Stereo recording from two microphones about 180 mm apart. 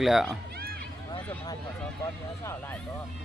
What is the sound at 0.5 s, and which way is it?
Run, 55° right (ahead or behind).